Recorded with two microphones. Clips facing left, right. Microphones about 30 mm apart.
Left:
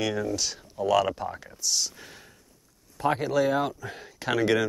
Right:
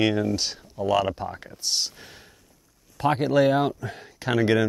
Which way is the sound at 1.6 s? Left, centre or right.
Right.